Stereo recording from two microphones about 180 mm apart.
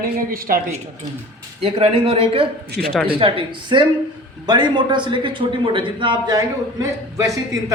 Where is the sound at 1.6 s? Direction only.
35° right (ahead or behind).